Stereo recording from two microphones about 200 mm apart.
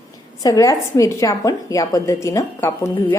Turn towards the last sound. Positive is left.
turn(degrees=15)  # may be behind; listen again after turning